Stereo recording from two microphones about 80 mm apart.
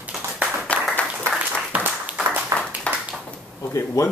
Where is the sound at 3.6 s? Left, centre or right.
Left.